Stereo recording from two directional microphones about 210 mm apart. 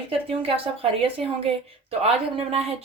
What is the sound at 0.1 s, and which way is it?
Speech, 25° right (ahead or behind).